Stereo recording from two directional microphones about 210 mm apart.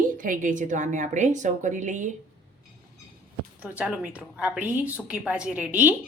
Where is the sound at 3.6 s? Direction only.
5° right (ahead or behind).